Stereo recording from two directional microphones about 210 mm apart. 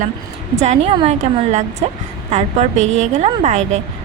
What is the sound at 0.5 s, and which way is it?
A woman's voice, 35° right (ahead or behind).